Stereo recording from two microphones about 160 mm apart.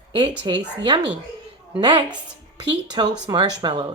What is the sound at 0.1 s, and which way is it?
A woman's voice, 30° right (ahead or behind).